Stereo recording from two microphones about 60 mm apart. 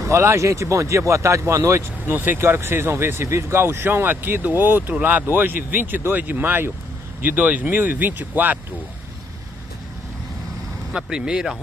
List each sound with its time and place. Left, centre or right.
0.0 s speech: right
2.0 s speech: right
10.9 s speech: centre